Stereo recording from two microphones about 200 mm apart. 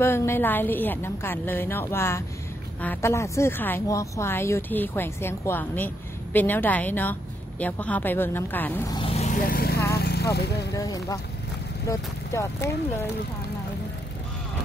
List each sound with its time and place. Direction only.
0.0 s speech: 10° left (ahead or behind)
8.9 s vehicle: 30° left (ahead or behind); by 10.2 s 55° left (ahead or behind)
10.3 s speech: 55° left (ahead or behind)
10.7 s speech: 15° left (ahead or behind)